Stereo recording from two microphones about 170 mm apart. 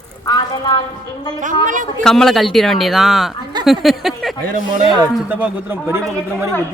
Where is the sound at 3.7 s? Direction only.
Centre (ahead or behind).